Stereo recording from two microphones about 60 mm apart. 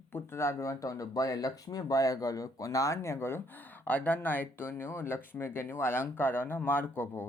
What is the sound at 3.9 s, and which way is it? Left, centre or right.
Speech, left.